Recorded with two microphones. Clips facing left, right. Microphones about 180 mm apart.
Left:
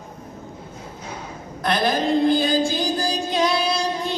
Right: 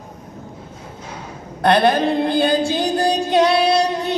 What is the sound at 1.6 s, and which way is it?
Chant, 65° right (ahead or behind).